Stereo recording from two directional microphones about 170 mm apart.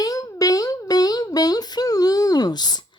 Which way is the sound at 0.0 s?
20° left (ahead or behind).